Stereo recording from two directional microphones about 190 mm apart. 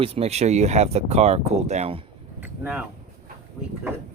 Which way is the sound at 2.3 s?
10° right (ahead or behind).